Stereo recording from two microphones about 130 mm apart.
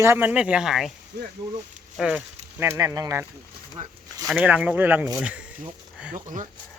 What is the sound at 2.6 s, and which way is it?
Speech, 25° right (ahead or behind).